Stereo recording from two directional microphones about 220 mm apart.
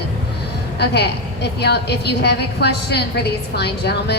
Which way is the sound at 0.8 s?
50° left (ahead or behind).